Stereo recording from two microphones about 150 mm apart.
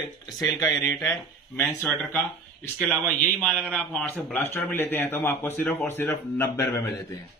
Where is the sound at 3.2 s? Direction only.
10° left (ahead or behind).